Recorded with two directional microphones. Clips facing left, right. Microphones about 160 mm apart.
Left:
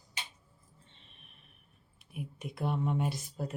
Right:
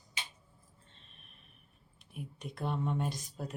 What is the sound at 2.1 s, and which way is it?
Speech, 5° left (ahead or behind).